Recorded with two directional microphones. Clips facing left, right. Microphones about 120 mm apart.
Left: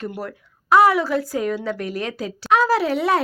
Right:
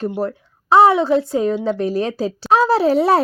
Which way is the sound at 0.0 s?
30° right (ahead or behind).